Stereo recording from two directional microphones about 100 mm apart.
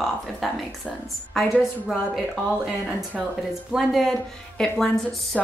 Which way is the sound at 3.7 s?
Centre (ahead or behind).